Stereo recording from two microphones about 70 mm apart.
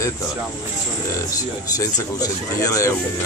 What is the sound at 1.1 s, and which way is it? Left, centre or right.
A man's voice, left.